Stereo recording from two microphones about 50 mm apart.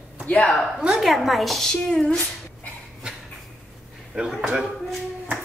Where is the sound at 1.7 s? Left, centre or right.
Centre.